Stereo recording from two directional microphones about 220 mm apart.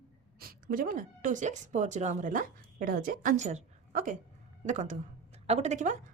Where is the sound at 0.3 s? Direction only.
40° right (ahead or behind).